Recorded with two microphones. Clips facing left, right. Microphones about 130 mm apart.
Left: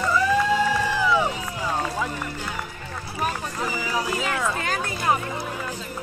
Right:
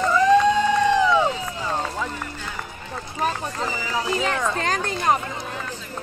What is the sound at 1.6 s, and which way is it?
Run, 10° left (ahead or behind).